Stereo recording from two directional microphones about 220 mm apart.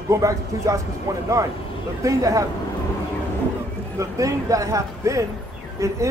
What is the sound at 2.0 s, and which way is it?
Speech, 15° right (ahead or behind).